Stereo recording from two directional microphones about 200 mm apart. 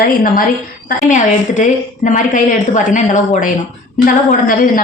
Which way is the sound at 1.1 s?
40° left (ahead or behind).